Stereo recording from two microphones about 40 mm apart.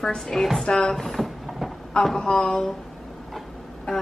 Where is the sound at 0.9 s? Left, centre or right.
Centre.